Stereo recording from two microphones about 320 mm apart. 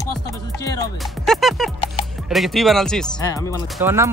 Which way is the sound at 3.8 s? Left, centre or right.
Centre.